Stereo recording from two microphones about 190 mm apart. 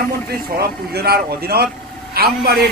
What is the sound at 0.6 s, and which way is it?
Speech, 55° right (ahead or behind).